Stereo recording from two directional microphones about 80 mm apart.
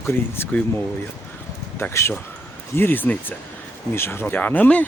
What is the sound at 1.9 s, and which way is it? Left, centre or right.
Speech, left.